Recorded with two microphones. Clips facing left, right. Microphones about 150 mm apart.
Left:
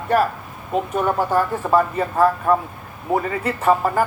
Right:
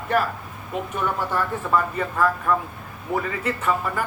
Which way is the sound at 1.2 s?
40° left (ahead or behind).